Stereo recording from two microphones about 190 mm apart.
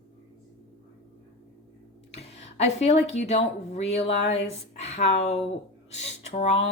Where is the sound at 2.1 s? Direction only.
35° left (ahead or behind).